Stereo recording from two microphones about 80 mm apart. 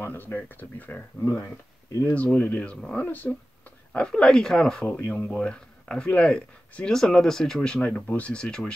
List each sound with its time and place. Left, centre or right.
0.0 s speech: left
3.1 s speech: left
3.9 s speech: centre